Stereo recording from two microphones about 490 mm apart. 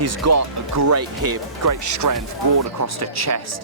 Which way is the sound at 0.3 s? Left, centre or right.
Right.